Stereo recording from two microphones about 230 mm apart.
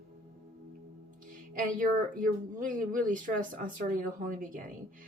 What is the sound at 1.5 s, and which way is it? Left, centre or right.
Speech, right.